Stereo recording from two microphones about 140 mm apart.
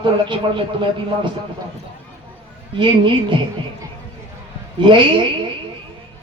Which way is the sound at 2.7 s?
35° right (ahead or behind).